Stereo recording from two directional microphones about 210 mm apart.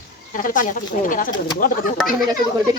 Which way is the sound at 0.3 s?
40° left (ahead or behind).